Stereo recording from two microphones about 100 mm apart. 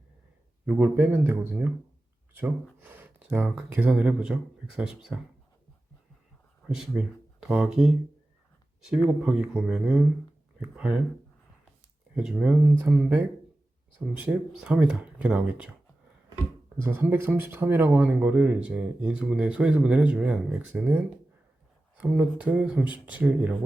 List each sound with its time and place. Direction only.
0.7 s speech: 20° right (ahead or behind)
6.7 s speech: 10° right (ahead or behind)
12.1 s speech: 10° right (ahead or behind)
14.2 s speech: 15° right (ahead or behind)
16.7 s speech: 20° right (ahead or behind)